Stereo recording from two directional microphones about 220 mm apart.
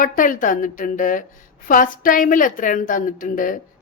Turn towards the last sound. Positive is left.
turn(degrees=40)  # may be behind; listen again after turning